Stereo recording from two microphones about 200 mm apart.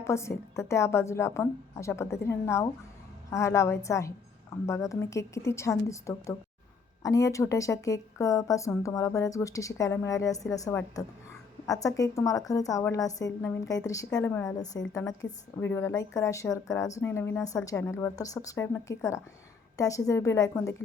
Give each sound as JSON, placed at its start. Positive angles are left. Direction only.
{"t": 0.0, "sound": "a woman's voice", "side_deg": 15}